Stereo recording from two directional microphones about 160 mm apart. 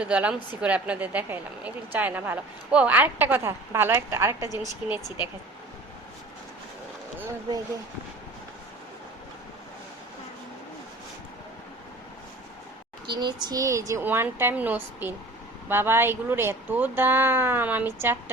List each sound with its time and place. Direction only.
0.0 s a woman's voice: 5° right (ahead or behind)
5.0 s speech: 25° left (ahead or behind)
7.2 s speech: 20° right (ahead or behind)
13.1 s a woman's voice: 25° right (ahead or behind)